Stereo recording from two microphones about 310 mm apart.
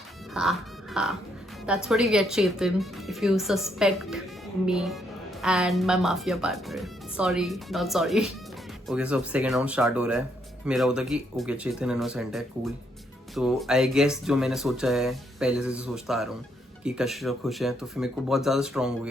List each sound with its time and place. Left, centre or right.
0.3 s music: centre
1.6 s speech: centre